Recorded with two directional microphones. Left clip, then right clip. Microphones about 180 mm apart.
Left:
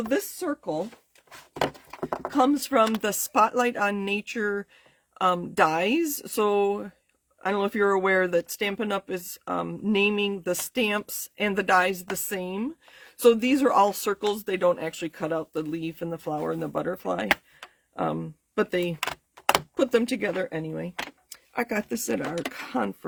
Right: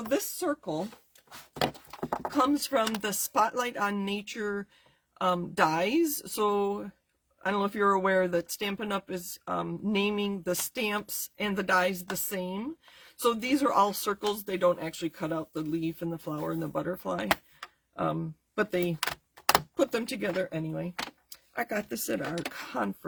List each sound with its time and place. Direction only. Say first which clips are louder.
0.1 s speech: right 1 dB; 40° left (ahead or behind)
2.0 s a sound: left 2 dB; 10° left (ahead or behind)
2.3 s speech: left 5 dB; 45° left (ahead or behind)